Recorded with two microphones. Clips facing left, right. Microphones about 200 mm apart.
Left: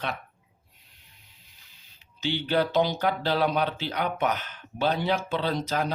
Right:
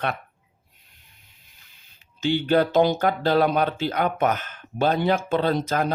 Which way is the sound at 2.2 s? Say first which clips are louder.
Right 6 dB; 50° right (ahead or behind).